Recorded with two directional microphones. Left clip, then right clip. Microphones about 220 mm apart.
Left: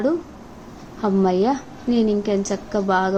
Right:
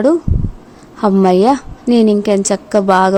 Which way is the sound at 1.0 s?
50° right (ahead or behind).